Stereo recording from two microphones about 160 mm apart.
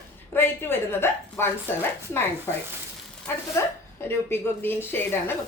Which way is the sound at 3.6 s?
15° left (ahead or behind).